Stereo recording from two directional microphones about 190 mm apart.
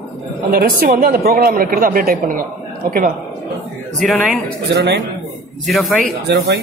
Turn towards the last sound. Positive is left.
turn(degrees=-60)  # may be behind; listen again after turning